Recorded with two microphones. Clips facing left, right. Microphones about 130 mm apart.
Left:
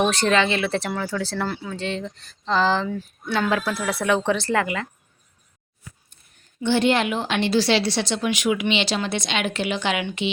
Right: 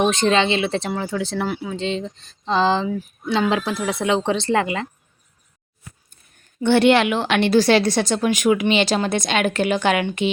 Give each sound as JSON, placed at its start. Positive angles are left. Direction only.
{"t": 0.0, "sound": "speech", "side_deg": -20}
{"t": 6.6, "sound": "a woman's voice", "side_deg": -60}